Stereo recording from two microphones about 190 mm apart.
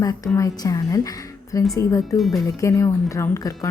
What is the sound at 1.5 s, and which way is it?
Speech, 15° left (ahead or behind).